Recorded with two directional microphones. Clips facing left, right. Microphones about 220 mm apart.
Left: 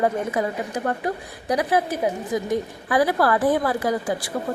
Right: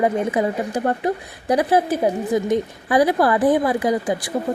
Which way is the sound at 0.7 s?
30° right (ahead or behind).